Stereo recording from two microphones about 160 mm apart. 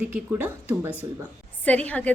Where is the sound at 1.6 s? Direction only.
10° left (ahead or behind).